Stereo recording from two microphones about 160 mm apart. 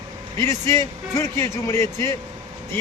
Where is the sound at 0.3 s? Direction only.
15° left (ahead or behind).